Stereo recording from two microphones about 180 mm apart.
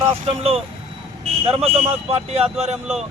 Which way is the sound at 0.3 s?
35° right (ahead or behind).